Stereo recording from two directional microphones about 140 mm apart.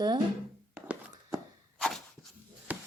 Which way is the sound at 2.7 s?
10° right (ahead or behind).